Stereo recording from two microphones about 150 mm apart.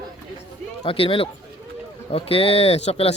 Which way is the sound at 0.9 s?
35° left (ahead or behind).